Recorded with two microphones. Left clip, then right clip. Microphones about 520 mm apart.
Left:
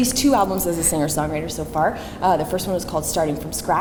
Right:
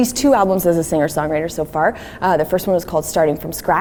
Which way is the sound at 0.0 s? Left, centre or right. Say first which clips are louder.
Right 4 dB; right.